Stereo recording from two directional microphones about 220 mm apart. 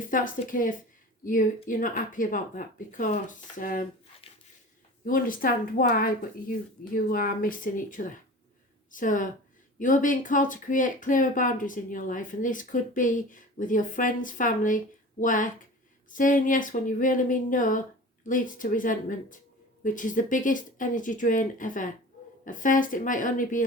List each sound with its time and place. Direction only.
0.1 s speech: 40° left (ahead or behind)
5.0 s speech: 40° left (ahead or behind)